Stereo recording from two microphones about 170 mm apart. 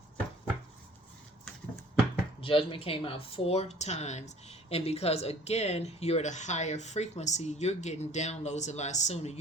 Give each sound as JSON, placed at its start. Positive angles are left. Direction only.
{"t": 2.4, "sound": "a woman's voice", "side_deg": 30}